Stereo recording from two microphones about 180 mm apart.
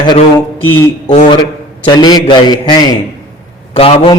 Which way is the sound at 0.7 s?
15° left (ahead or behind).